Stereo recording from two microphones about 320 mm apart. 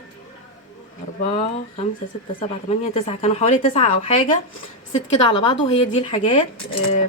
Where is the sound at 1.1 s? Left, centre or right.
Centre.